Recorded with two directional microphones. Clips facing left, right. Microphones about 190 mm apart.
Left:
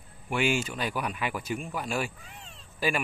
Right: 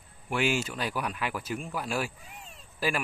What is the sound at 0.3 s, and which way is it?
Speech, centre (ahead or behind).